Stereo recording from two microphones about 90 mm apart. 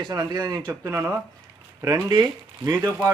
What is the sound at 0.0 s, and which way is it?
Speech, 50° right (ahead or behind).